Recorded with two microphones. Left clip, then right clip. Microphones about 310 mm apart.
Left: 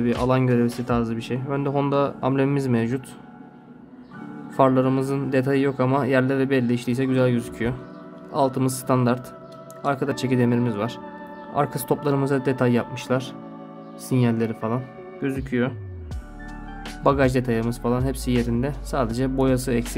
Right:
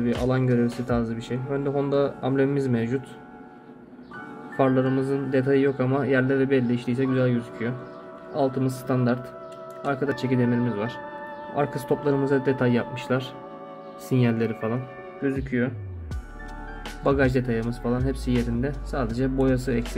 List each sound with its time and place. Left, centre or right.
0.3 s a man's voice: centre
4.6 s a man's voice: centre
15.2 s speech: left
17.0 s speech: centre